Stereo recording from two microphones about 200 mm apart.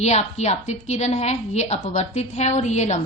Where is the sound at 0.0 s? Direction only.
35° left (ahead or behind).